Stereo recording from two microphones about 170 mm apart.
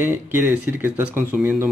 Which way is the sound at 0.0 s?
10° right (ahead or behind).